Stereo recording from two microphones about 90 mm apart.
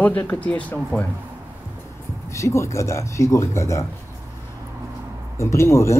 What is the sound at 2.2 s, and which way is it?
Speech, 30° left (ahead or behind).